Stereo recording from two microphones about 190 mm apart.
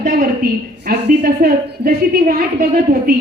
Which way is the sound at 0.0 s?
50° right (ahead or behind).